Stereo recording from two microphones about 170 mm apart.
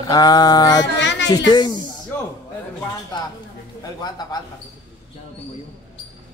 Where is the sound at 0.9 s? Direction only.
90° left.